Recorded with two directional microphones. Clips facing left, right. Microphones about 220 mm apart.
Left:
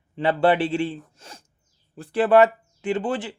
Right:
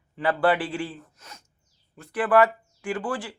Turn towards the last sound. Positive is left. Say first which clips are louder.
# left 4 dB
turn(degrees=20)  # may be behind; listen again after turning